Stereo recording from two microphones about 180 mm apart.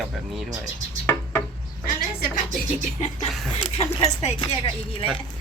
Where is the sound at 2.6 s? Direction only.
40° left (ahead or behind).